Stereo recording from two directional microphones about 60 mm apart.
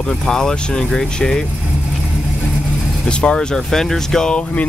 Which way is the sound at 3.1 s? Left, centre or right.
Centre.